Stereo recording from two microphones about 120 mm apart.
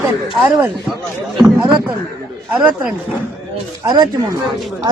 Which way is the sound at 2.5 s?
15° right (ahead or behind).